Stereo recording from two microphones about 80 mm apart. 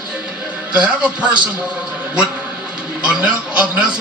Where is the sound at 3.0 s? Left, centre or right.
Centre.